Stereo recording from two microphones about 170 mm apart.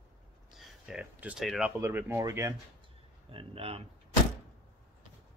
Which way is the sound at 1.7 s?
15° right (ahead or behind).